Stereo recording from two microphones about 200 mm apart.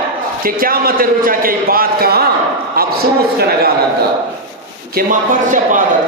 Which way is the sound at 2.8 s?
50° right (ahead or behind).